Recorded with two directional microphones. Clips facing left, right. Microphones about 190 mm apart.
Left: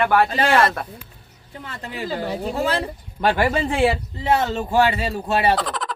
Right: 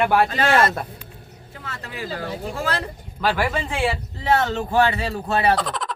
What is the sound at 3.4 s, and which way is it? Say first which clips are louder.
Speech: left 4 dB; 35° left (ahead or behind).